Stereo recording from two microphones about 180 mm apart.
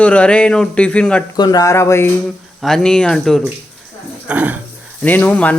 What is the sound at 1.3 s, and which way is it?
Speech, 20° left (ahead or behind).